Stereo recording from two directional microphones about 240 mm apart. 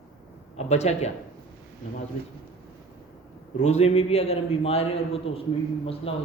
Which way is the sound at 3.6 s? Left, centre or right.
Left.